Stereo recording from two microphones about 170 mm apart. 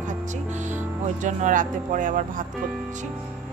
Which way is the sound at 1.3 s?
50° right (ahead or behind).